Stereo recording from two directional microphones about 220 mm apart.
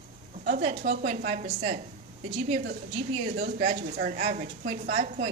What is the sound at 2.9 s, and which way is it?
Speech, 30° right (ahead or behind).